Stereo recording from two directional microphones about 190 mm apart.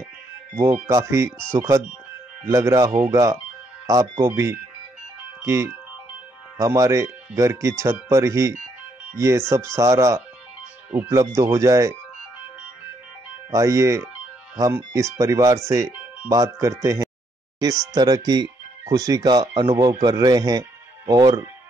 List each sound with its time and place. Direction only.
0.8 s speech: 15° right (ahead or behind)
13.5 s speech: 15° right (ahead or behind)